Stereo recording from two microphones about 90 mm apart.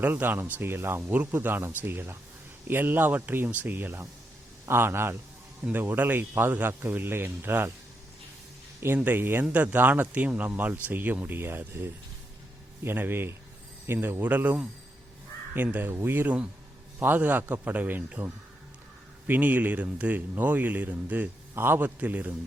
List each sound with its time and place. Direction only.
0.0 s speech: 20° right (ahead or behind)
9.0 s speech: 20° right (ahead or behind)
19.3 s speech: 20° right (ahead or behind)